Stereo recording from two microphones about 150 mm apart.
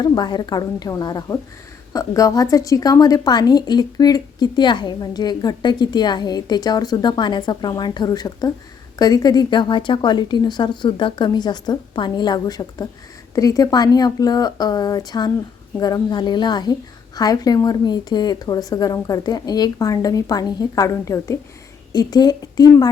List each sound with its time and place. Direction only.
0.0 s a woman's voice: 30° left (ahead or behind)